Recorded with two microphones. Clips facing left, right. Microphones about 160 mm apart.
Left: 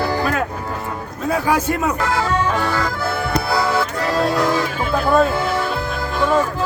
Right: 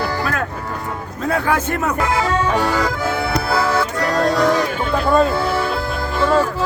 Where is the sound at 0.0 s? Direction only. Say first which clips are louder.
Left 2 dB; 20° left (ahead or behind).